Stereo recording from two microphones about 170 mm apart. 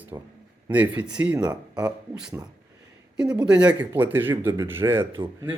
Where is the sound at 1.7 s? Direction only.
5° right (ahead or behind).